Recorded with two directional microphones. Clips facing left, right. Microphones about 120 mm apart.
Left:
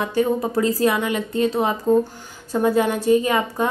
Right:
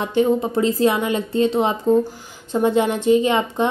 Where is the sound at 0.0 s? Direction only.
20° right (ahead or behind).